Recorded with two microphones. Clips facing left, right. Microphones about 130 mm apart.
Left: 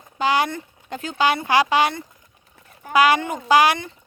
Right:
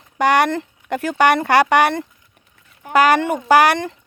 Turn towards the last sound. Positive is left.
turn(degrees=-75)  # may be behind; listen again after turning